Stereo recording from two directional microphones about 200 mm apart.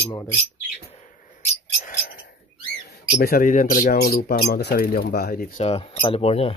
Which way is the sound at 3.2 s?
45° left (ahead or behind).